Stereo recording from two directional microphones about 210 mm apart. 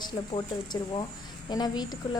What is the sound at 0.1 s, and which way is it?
A woman's voice, 20° left (ahead or behind).